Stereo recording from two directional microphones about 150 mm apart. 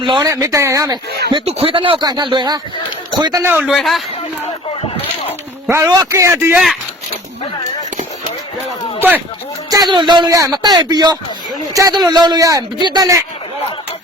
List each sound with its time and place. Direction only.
0.0 s speech: 30° right (ahead or behind)
1.3 s speech: 40° right (ahead or behind)
3.4 s a man's voice: 15° right (ahead or behind)
3.7 s a man's voice: centre (ahead or behind)
5.6 s a man's voice: 20° right (ahead or behind)
9.0 s a sound: 10° right (ahead or behind)
9.6 s speech: 25° right (ahead or behind)